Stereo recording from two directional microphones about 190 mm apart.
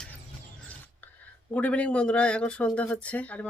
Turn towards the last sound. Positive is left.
turn(degrees=5)  # may be behind; listen again after turning